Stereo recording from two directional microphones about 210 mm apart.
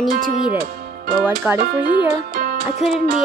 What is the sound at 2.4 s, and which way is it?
Music, 45° right (ahead or behind).